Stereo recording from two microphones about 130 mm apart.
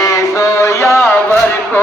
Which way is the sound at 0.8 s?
Centre (ahead or behind).